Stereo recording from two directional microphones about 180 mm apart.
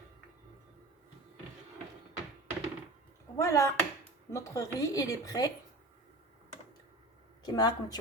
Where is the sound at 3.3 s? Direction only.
15° left (ahead or behind).